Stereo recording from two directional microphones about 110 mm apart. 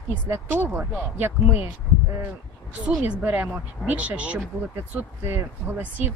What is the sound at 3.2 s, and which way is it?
Speech, 15° right (ahead or behind).